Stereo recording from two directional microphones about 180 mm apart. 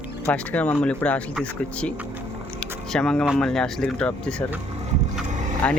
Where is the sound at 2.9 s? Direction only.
5° left (ahead or behind).